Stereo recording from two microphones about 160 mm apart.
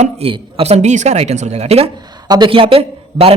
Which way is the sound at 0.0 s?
35° right (ahead or behind).